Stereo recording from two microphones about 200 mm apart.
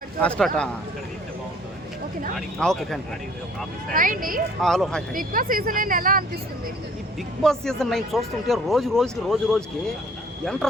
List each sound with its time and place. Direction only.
0.2 s speech: 5° left (ahead or behind)
2.6 s speech: centre (ahead or behind)
3.9 s speech: 40° right (ahead or behind)
4.6 s speech: centre (ahead or behind)
5.1 s speech: 45° right (ahead or behind)
7.2 s speech: centre (ahead or behind)